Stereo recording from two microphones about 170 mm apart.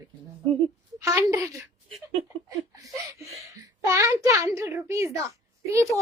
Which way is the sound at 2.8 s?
20° right (ahead or behind).